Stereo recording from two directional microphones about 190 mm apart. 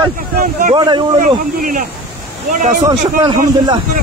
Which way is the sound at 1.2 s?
45° right (ahead or behind).